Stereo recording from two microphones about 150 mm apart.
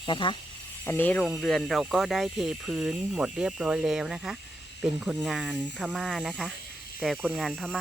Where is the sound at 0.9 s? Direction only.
10° left (ahead or behind).